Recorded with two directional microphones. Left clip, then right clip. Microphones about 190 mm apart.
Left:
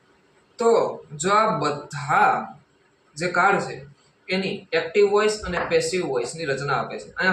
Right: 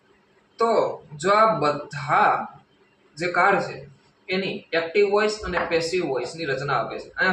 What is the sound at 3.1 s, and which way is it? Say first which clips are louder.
Speech: even; 5° left (ahead or behind).